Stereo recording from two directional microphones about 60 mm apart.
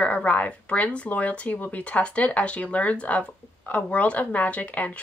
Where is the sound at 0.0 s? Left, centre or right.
Left.